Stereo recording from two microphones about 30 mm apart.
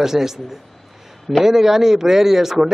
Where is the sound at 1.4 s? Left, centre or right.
Centre.